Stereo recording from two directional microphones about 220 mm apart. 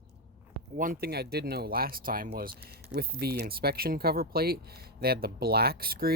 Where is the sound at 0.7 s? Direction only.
40° right (ahead or behind).